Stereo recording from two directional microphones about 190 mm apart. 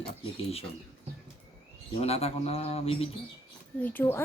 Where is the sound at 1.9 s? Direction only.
30° left (ahead or behind).